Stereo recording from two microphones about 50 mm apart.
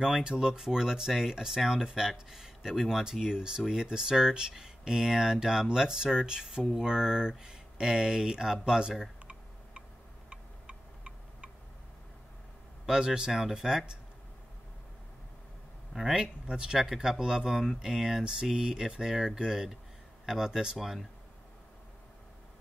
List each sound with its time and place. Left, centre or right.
0.0 s speech: centre
10.3 s tick-tock: centre
12.8 s speech: centre
15.9 s speech: centre